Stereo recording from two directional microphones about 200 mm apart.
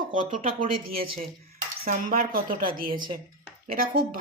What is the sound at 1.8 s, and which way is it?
Speech, 45° right (ahead or behind).